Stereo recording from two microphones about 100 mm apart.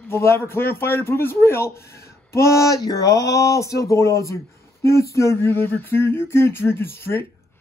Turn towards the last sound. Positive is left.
turn(degrees=25)  # may be behind; listen again after turning